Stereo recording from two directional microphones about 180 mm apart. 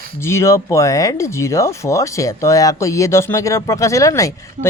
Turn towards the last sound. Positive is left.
turn(degrees=15)  # may be behind; listen again after turning